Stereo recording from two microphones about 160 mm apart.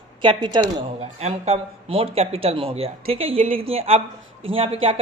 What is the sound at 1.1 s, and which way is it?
A woman's voice, 40° right (ahead or behind).